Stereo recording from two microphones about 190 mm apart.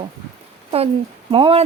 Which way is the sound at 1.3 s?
30° right (ahead or behind).